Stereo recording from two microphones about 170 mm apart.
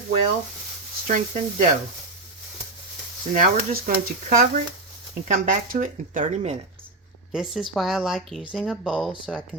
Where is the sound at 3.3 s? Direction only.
50° right (ahead or behind).